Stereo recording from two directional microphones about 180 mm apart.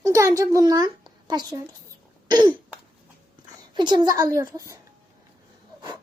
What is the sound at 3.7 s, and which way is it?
A child's voice, 25° right (ahead or behind).